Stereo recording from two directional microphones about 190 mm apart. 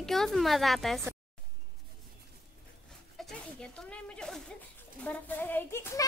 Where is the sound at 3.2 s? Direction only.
Centre (ahead or behind).